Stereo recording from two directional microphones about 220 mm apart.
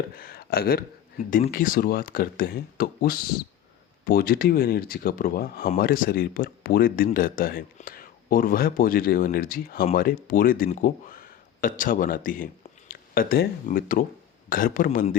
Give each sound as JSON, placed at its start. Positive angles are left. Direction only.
{"t": 0.2, "sound": "speech", "side_deg": 45}